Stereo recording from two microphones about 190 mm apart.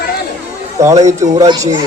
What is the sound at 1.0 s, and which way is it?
Speech, 40° right (ahead or behind).